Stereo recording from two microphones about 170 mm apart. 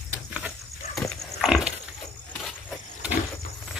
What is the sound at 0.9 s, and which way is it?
Pig, centre (ahead or behind).